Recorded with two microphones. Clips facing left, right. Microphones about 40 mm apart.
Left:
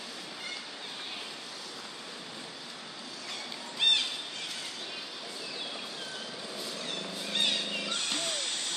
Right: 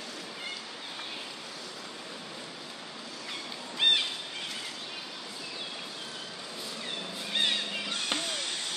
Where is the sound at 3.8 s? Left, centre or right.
Centre.